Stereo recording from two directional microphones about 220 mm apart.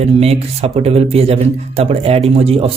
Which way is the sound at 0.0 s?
30° right (ahead or behind).